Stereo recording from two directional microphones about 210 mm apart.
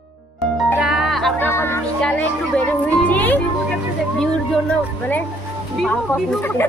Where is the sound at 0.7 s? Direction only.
Centre (ahead or behind).